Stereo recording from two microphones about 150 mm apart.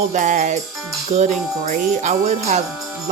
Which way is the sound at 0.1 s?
55° right (ahead or behind).